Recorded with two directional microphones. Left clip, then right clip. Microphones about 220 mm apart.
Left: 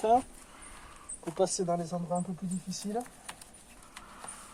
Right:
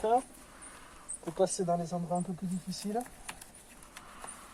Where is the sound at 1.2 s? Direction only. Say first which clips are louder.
Even; 25° left (ahead or behind).